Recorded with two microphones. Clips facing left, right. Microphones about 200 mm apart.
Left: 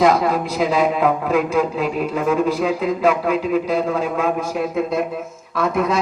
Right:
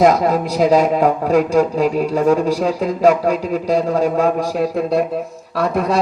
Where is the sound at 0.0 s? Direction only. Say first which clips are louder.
Right 3 dB; 45° right (ahead or behind).